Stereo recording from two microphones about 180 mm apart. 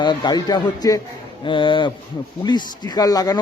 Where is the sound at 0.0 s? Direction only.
25° left (ahead or behind).